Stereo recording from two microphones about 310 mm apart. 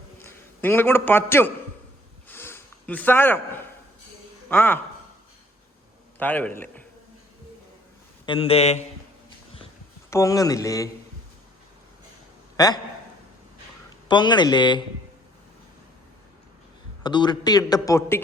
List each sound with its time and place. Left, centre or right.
0.2 s a man's voice: centre
2.3 s a sound: centre
4.4 s speech: centre
6.1 s a man's voice: centre
8.3 s speech: centre
10.1 s speech: centre
12.5 s a man's voice: centre
14.1 s speech: centre
17.0 s speech: centre